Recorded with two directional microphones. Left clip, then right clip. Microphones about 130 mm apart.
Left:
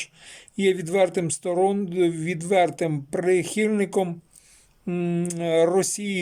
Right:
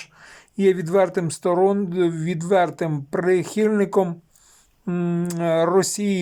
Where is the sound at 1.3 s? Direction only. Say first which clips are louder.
Right 4 dB; 15° left (ahead or behind).